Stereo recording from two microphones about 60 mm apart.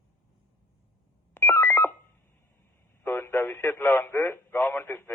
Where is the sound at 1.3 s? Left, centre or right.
Left.